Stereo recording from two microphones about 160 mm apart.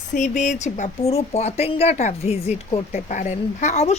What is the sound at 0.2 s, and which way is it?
A woman's voice, 45° left (ahead or behind).